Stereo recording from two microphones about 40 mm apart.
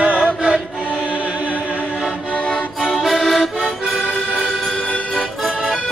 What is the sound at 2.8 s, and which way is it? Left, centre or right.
Accordion, centre.